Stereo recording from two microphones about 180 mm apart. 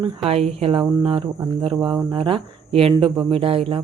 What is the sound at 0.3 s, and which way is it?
Speech, 35° right (ahead or behind).